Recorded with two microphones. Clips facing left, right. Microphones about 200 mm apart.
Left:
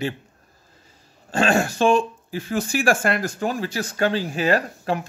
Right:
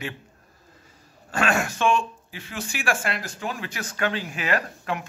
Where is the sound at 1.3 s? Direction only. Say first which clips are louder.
Left 5 dB; 30° left (ahead or behind).